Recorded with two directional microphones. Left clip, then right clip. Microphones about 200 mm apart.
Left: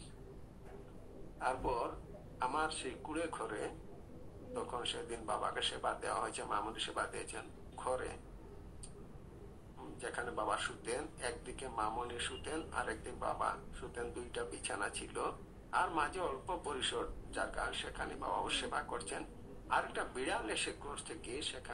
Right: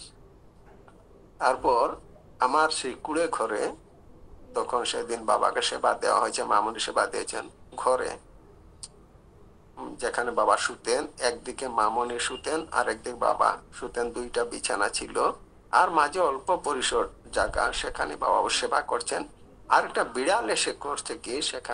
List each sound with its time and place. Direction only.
1.4 s a man's voice: 55° right (ahead or behind)
9.8 s a man's voice: 55° right (ahead or behind)